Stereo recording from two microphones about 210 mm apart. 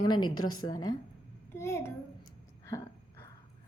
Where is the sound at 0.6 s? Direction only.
20° left (ahead or behind).